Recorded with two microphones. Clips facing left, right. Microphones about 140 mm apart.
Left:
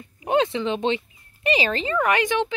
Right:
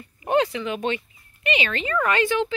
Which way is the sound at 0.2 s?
15° left (ahead or behind).